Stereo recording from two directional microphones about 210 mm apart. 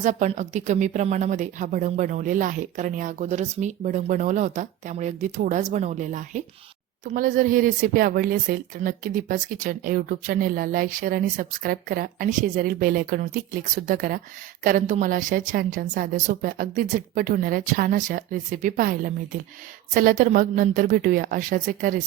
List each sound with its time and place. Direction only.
0.0 s speech: 35° right (ahead or behind)